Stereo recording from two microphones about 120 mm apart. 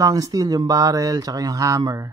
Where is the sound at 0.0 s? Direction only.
30° right (ahead or behind).